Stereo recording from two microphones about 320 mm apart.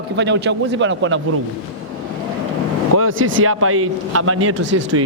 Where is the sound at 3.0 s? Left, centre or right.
Right.